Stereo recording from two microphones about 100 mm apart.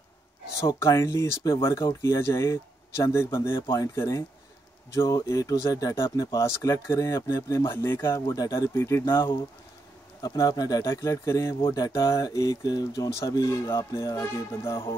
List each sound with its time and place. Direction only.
0.7 s speech: 30° left (ahead or behind)